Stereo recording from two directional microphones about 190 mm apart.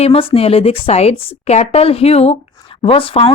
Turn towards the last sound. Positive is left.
turn(degrees=30)  # may be behind; listen again after turning